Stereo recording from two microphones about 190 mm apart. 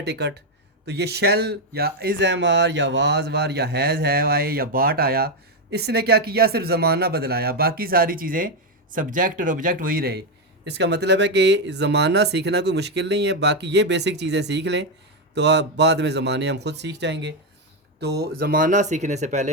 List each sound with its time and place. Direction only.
0.0 s speech: 60° right (ahead or behind); by 19.5 s 35° right (ahead or behind)